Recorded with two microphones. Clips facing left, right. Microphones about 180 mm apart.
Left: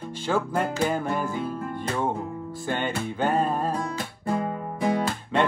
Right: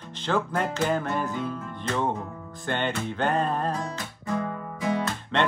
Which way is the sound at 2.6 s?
5° left (ahead or behind).